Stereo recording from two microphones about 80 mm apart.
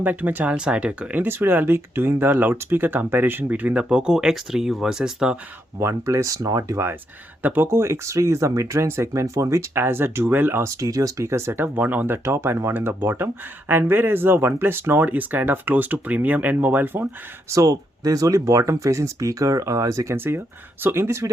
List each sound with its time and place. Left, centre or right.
0.0 s speech: right
5.8 s speech: right
7.4 s speech: right
10.8 s speech: right
17.5 s speech: right
20.1 s speech: right